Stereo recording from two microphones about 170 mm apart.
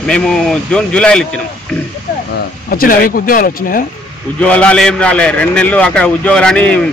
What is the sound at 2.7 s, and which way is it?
Speech, 60° left (ahead or behind).